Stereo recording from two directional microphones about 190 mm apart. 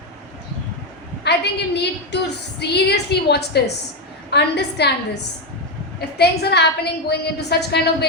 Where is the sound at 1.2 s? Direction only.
60° left (ahead or behind).